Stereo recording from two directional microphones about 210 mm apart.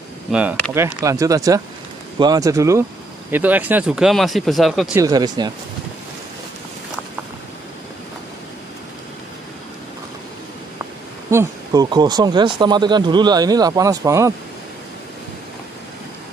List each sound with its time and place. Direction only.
0.3 s speech: 5° right (ahead or behind)
5.0 s speech: 20° right (ahead or behind)
11.2 s speech: 15° right (ahead or behind)